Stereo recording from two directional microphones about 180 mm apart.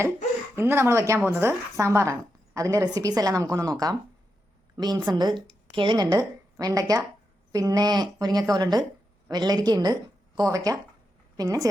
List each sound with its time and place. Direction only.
0.5 s a woman's voice: 15° right (ahead or behind)
5.0 s a woman's voice: 25° right (ahead or behind)